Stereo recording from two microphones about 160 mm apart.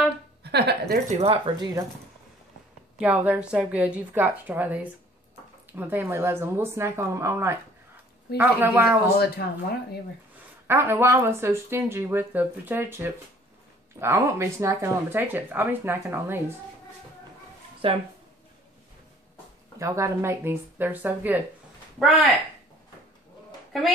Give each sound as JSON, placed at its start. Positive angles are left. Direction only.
{"t": 0.4, "sound": "a sound", "side_deg": -90}
{"t": 0.9, "sound": "speech", "side_deg": -35}
{"t": 3.0, "sound": "speech", "side_deg": -10}
{"t": 9.4, "sound": "speech", "side_deg": 80}
{"t": 10.7, "sound": "speech", "side_deg": -15}
{"t": 17.8, "sound": "speech", "side_deg": -35}
{"t": 19.8, "sound": "speech", "side_deg": -20}
{"t": 21.9, "sound": "speech", "side_deg": 0}